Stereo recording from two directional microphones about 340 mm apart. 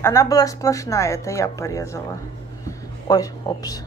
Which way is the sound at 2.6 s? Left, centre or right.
Centre.